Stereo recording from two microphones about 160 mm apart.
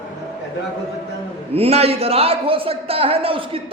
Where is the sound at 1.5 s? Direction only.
40° right (ahead or behind).